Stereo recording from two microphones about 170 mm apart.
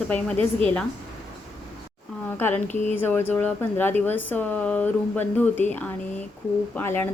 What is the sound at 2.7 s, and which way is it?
Speech, 45° left (ahead or behind).